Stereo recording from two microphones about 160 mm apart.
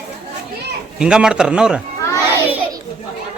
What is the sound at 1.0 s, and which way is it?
Speech, 5° right (ahead or behind).